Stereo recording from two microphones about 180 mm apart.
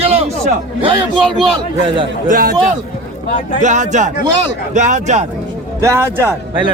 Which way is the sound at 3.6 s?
40° right (ahead or behind).